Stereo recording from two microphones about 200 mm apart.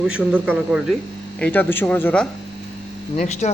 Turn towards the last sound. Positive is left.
turn(degrees=35)  # may be behind; listen again after turning